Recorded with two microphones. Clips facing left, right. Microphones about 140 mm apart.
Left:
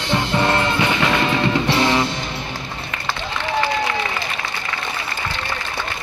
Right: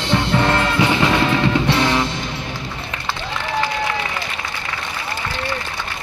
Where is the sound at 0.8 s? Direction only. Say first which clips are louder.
Right 2 dB; 15° right (ahead or behind).